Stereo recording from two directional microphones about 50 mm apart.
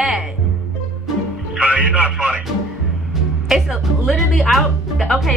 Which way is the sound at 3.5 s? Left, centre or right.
Centre.